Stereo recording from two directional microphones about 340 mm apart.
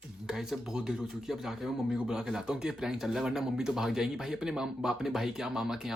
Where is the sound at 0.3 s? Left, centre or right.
Centre.